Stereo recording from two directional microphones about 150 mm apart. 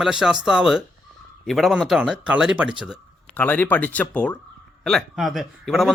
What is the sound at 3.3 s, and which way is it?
A man's voice, 10° left (ahead or behind).